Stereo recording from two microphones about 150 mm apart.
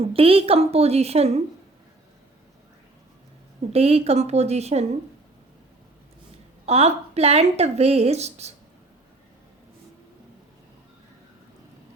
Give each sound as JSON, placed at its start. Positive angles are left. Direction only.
{"t": 0.0, "sound": "speech", "side_deg": -40}
{"t": 3.7, "sound": "speech", "side_deg": -45}
{"t": 6.7, "sound": "speech", "side_deg": -45}